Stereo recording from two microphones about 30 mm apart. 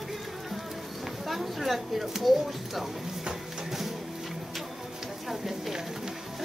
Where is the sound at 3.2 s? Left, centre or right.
Centre.